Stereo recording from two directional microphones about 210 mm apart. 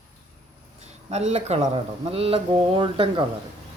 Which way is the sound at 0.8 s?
30° right (ahead or behind).